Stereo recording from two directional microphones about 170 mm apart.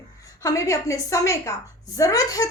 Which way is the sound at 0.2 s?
20° left (ahead or behind).